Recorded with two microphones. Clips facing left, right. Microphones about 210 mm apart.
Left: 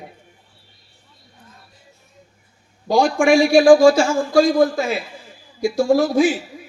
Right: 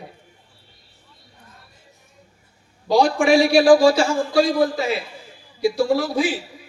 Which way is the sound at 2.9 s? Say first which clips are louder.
Left 1 dB; 45° left (ahead or behind).